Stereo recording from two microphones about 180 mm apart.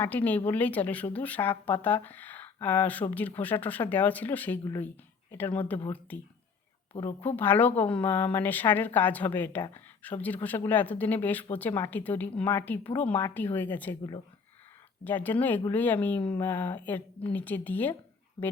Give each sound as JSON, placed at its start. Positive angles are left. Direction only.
{"t": 0.0, "sound": "a woman's voice", "side_deg": 10}
{"t": 6.9, "sound": "a woman's voice", "side_deg": 25}
{"t": 7.3, "sound": "a woman's voice", "side_deg": 10}
{"t": 15.0, "sound": "a woman's voice", "side_deg": 10}